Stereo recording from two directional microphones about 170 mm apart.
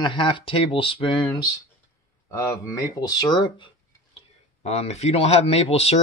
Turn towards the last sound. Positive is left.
turn(degrees=35)  # may be behind; listen again after turning